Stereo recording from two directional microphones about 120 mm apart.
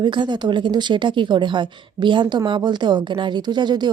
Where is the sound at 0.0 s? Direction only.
40° right (ahead or behind).